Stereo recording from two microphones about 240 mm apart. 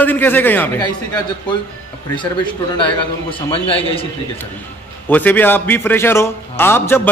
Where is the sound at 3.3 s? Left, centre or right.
Left.